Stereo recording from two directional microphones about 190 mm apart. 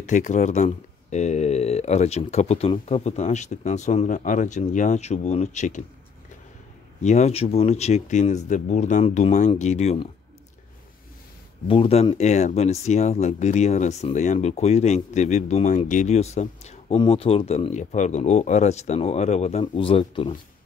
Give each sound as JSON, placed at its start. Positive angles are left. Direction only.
{"t": 0.1, "sound": "speech", "side_deg": 40}
{"t": 7.0, "sound": "speech", "side_deg": 35}
{"t": 11.6, "sound": "speech", "side_deg": 30}